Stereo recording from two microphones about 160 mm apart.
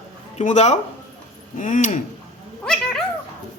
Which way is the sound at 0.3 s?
45° left (ahead or behind).